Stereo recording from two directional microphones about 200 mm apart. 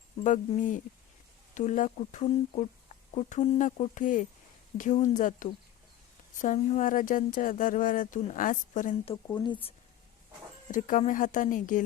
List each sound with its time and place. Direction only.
0.2 s speech: 40° left (ahead or behind)
9.2 s speech: 25° left (ahead or behind)
10.7 s speech: 40° left (ahead or behind)